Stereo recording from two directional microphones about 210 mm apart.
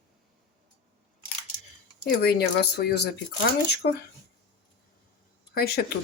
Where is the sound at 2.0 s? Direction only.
50° left (ahead or behind).